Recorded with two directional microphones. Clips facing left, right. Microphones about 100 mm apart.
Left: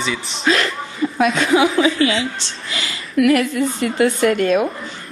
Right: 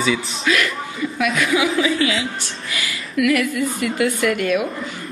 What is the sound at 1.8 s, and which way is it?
A woman's voice, 30° left (ahead or behind).